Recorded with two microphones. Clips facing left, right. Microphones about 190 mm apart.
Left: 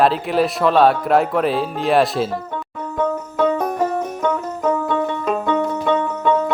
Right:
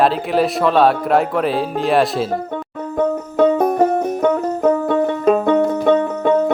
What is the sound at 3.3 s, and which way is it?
Music, 50° right (ahead or behind).